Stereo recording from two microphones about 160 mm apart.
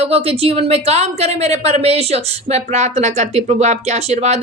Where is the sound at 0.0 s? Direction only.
40° right (ahead or behind).